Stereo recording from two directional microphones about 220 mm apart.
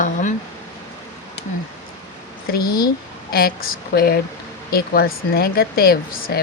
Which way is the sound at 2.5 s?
45° left (ahead or behind).